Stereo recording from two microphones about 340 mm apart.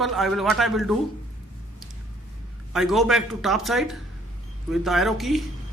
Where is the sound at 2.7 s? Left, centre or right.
Centre.